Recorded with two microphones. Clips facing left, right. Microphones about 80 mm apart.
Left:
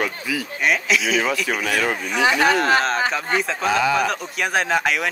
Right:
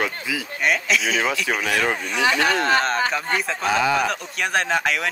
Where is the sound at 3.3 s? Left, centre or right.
Centre.